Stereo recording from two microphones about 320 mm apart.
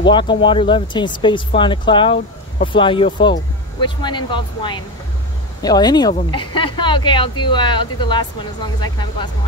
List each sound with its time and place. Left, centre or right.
0.0 s speech: centre